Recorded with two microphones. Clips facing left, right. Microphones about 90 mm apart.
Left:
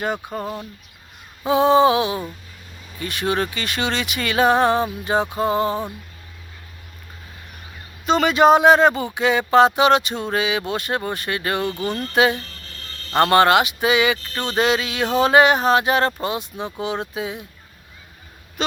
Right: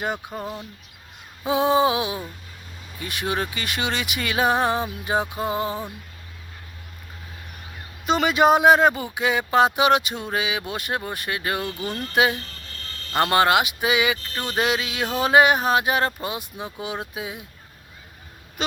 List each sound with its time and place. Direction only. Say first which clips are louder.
0.4 s speech: left 3 dB; 20° left (ahead or behind)
1.5 s speech: left 5 dB; 15° right (ahead or behind)
5.5 s a sound: left 5 dB; 65° left (ahead or behind)
8.0 s speech: left 3 dB; 10° right (ahead or behind)